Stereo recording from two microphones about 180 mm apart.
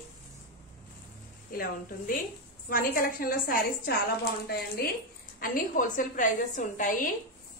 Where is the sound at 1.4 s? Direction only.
50° left (ahead or behind).